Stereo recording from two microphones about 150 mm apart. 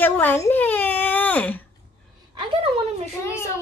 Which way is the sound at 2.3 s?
35° right (ahead or behind).